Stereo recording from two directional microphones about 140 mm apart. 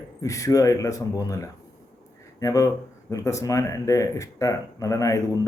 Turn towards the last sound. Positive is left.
turn(degrees=25)  # may be behind; listen again after turning